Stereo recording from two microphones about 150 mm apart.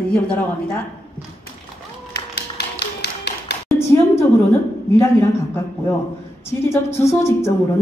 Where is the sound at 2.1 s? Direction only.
90° left.